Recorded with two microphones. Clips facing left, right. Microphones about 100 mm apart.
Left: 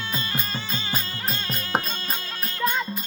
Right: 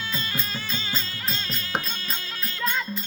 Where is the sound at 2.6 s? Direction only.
10° left (ahead or behind).